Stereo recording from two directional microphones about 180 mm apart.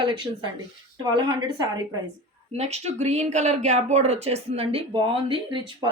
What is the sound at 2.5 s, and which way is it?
Speech, 35° right (ahead or behind).